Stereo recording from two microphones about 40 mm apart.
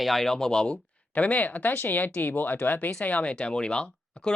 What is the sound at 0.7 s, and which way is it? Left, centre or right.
Speech, left.